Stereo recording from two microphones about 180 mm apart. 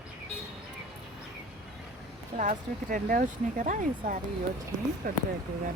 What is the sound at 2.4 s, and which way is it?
Speech, 45° right (ahead or behind).